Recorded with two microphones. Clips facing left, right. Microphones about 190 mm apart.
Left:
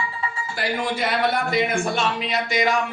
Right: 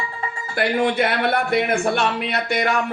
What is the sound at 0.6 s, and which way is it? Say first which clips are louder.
A man's voice: right 6 dB; 60° right (ahead or behind).